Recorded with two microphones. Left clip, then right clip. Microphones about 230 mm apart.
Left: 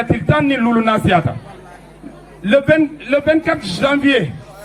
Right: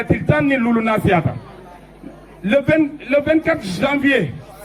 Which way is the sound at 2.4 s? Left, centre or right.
Left.